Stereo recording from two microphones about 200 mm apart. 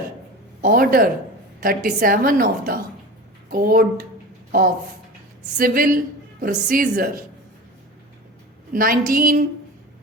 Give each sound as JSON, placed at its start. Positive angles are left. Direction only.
{"t": 0.6, "sound": "a woman's voice", "side_deg": -45}
{"t": 5.5, "sound": "a woman's voice", "side_deg": -45}
{"t": 8.7, "sound": "a woman's voice", "side_deg": -45}